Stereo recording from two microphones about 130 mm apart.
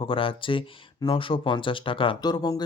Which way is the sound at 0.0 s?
45° left (ahead or behind).